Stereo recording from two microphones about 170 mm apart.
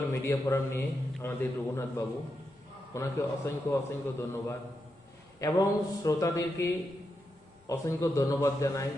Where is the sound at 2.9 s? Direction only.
15° left (ahead or behind).